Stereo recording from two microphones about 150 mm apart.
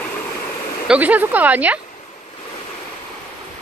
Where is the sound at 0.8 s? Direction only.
10° right (ahead or behind).